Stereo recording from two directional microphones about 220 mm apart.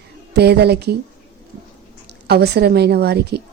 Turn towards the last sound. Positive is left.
turn(degrees=-45)  # may be behind; listen again after turning